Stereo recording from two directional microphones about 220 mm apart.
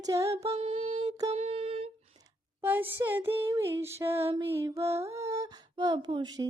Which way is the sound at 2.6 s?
10° right (ahead or behind).